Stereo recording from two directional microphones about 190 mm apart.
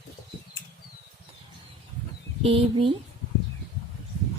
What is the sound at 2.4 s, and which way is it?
Speech, 30° right (ahead or behind).